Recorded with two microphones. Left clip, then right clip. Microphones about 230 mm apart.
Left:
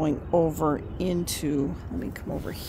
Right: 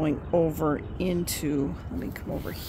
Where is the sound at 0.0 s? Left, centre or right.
Centre.